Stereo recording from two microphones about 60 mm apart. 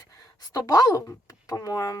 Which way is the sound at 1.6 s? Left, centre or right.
Left.